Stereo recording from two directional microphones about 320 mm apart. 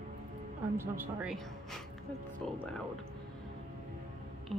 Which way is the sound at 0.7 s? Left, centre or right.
Centre.